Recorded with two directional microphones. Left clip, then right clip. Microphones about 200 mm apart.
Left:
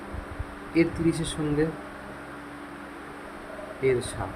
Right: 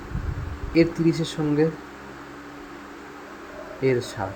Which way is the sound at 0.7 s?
25° right (ahead or behind).